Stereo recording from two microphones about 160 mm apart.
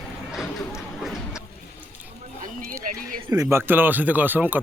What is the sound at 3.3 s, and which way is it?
Speech, 20° right (ahead or behind).